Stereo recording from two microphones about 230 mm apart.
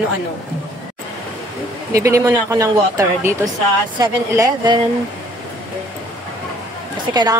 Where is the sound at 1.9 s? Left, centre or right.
Centre.